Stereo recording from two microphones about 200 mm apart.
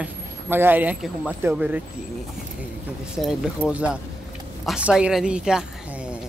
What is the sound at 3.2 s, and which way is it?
A woman's voice, centre (ahead or behind).